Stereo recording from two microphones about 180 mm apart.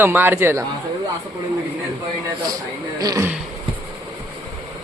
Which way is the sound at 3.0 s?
20° right (ahead or behind).